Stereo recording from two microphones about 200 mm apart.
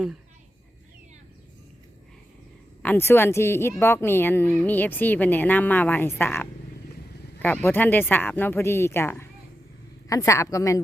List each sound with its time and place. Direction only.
2.8 s a woman's voice: 10° left (ahead or behind)